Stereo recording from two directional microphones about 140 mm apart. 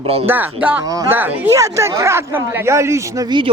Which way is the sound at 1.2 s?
10° right (ahead or behind).